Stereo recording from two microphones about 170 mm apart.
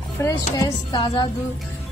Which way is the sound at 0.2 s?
20° left (ahead or behind).